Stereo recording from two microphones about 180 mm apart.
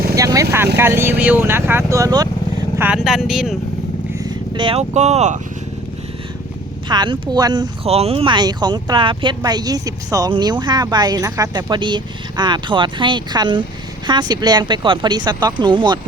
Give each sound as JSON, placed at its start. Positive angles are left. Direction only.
{"t": 0.2, "sound": "speech", "side_deg": -20}
{"t": 2.7, "sound": "speech", "side_deg": -10}
{"t": 4.2, "sound": "speech", "side_deg": -25}
{"t": 6.8, "sound": "speech", "side_deg": -25}
{"t": 7.9, "sound": "speech", "side_deg": -35}